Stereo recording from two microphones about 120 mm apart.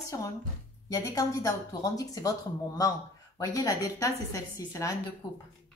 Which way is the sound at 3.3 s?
30° left (ahead or behind).